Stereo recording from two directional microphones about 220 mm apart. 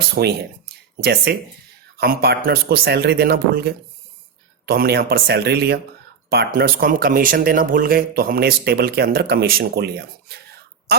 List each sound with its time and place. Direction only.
0.2 s speech: 45° right (ahead or behind)